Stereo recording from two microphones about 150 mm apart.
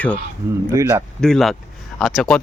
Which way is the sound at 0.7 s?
15° right (ahead or behind).